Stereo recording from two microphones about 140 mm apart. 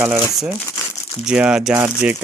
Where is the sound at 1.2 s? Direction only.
5° right (ahead or behind).